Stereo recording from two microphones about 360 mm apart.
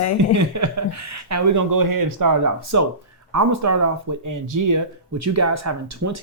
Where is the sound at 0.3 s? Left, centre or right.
Right.